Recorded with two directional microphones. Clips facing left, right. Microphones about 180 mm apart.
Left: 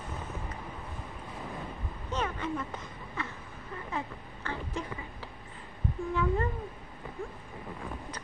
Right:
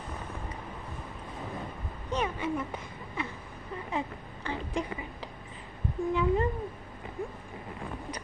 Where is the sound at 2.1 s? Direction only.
10° right (ahead or behind).